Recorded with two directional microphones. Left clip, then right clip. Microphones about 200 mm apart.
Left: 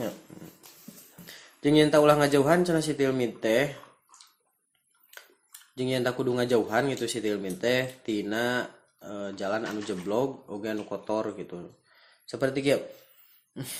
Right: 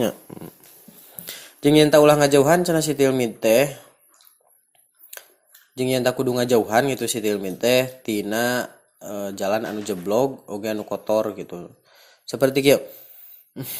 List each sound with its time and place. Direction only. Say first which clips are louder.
1.2 s speech: right 8 dB; 35° right (ahead or behind)
5.7 s speech: right 7 dB; 25° right (ahead or behind)